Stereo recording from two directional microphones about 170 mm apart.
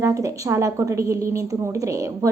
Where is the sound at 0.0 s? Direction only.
15° right (ahead or behind).